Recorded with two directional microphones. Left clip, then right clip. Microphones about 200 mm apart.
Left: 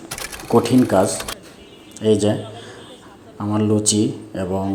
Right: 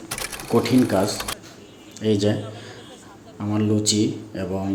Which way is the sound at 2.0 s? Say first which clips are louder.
Left 4 dB; 15° left (ahead or behind).